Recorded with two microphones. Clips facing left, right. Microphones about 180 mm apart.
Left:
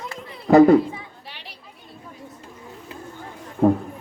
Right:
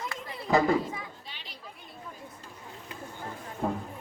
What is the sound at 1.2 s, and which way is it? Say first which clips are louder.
Chatter: left 5 dB; 65° left (ahead or behind).